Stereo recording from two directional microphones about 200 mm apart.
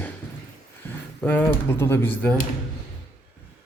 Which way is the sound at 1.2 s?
10° left (ahead or behind).